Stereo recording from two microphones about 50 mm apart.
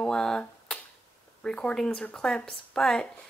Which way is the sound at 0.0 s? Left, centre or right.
Centre.